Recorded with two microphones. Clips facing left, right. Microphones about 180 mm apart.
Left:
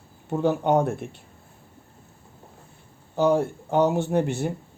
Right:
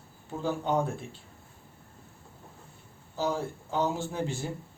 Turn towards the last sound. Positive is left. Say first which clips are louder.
# left 9 dB
turn(degrees=65)  # may be behind; listen again after turning